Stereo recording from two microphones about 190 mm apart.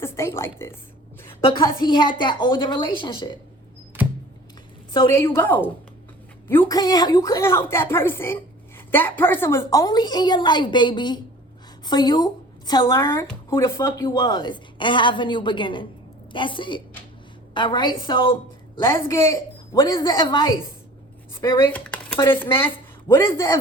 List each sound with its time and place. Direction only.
0.0 s speech: 15° left (ahead or behind)
1.5 s speech: 25° left (ahead or behind)
5.1 s a woman's voice: 15° left (ahead or behind)
18.8 s speech: 15° left (ahead or behind)
21.7 s a sound: 10° left (ahead or behind)
22.2 s a woman's voice: 10° left (ahead or behind)